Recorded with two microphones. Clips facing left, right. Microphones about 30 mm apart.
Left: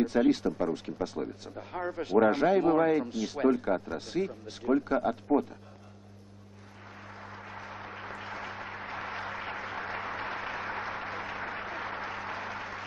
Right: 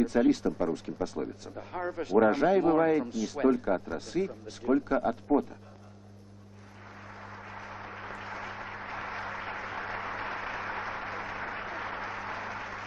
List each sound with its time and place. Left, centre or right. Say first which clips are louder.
0.1 s speech: even; centre
0.7 s speech: even; left
1.5 s speech: even; centre
3.1 s speech: even; left
3.5 s speech: even; centre
4.6 s speech: even; centre
5.0 s speech: even; centre
7.0 s a sound: even; centre